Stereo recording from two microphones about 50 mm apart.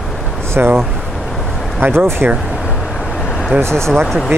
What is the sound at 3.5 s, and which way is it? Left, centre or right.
Speech, right.